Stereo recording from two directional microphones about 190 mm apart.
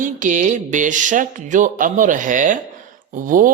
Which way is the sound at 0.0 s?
40° right (ahead or behind).